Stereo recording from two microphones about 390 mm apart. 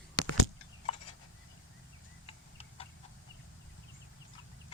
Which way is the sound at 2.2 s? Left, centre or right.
Centre.